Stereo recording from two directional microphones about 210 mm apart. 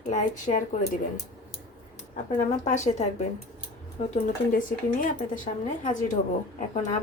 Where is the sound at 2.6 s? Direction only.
35° left (ahead or behind).